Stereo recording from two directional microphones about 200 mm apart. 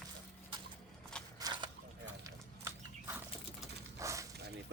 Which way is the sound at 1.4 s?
20° right (ahead or behind).